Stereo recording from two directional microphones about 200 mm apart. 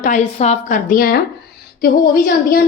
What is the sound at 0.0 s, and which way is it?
A woman's voice, 35° left (ahead or behind).